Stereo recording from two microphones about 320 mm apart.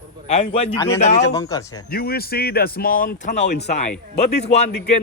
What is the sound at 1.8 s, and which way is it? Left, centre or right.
A man's voice, left.